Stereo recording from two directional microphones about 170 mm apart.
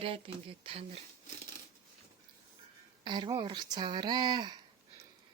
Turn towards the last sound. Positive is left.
turn(degrees=-25)  # may be behind; listen again after turning